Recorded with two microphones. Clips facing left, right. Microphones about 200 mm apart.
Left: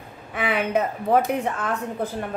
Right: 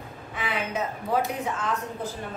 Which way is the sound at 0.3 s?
60° left (ahead or behind).